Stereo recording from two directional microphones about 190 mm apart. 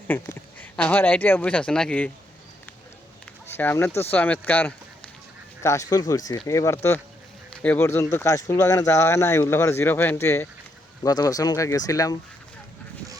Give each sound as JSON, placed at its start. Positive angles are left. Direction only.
{"t": 0.1, "sound": "speech", "side_deg": 10}
{"t": 3.6, "sound": "speech", "side_deg": 10}
{"t": 5.6, "sound": "speech", "side_deg": 20}